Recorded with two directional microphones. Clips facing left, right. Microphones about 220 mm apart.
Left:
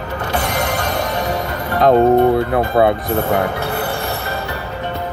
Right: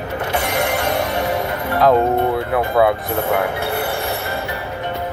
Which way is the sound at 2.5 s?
50° left (ahead or behind).